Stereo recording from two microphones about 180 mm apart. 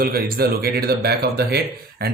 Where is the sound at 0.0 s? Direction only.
55° right (ahead or behind).